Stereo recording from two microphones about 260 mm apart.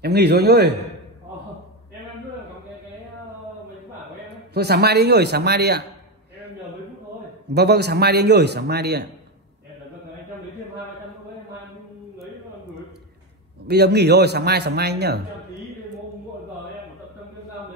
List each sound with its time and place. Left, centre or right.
0.0 s speech: right
4.3 s speech: right
7.5 s speech: right
13.7 s speech: right